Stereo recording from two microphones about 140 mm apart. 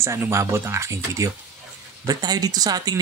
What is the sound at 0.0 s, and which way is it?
Speech, 20° right (ahead or behind).